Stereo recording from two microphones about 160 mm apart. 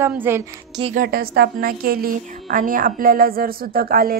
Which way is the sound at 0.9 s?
70° right (ahead or behind).